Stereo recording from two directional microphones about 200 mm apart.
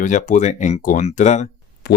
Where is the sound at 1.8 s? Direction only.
55° left (ahead or behind).